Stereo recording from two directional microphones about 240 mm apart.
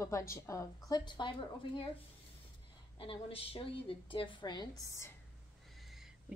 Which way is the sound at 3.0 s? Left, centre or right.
Left.